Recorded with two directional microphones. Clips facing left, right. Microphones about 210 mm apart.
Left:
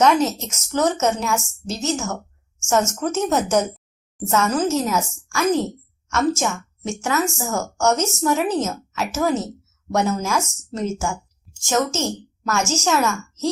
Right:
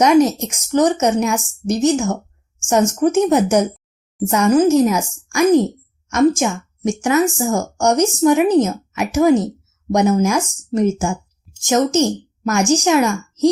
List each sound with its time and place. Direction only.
0.0 s speech: 15° right (ahead or behind)